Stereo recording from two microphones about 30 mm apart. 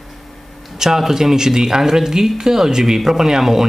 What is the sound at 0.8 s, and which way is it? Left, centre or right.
Speech, centre.